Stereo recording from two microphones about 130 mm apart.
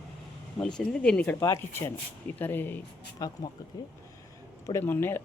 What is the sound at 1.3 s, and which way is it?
Speech, 20° left (ahead or behind).